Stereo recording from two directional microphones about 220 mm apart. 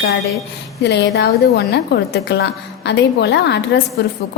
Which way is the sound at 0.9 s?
50° left (ahead or behind).